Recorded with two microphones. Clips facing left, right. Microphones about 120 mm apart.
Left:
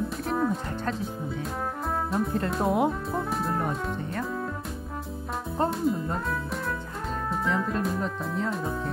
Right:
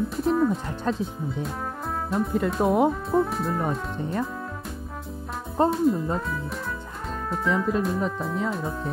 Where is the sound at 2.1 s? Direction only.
Centre (ahead or behind).